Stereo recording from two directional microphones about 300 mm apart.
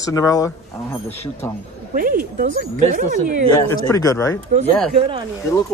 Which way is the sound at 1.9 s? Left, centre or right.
Right.